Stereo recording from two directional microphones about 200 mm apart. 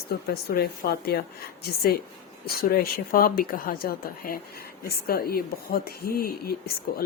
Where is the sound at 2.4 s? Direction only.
50° left (ahead or behind).